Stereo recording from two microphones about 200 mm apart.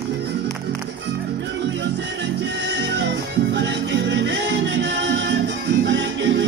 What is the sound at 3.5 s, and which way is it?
Music, 60° right (ahead or behind).